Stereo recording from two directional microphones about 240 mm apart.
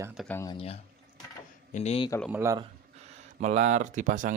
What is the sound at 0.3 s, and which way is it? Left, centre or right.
Speech, centre.